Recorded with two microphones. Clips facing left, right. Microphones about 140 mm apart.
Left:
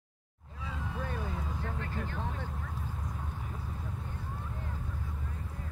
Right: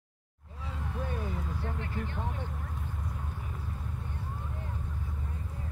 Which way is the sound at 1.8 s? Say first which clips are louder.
Right 1 dB; 20° right (ahead or behind).